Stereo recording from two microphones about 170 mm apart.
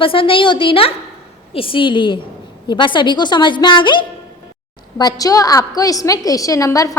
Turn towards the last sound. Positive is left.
turn(degrees=20)  # may be behind; listen again after turning